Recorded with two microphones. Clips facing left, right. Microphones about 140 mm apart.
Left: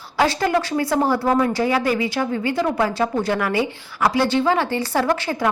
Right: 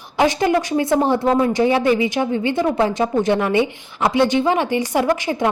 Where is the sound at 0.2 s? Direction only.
20° right (ahead or behind).